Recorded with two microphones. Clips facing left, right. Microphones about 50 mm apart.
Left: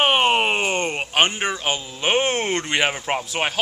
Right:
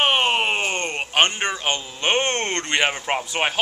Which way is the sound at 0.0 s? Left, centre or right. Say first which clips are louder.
Left 2 dB; centre.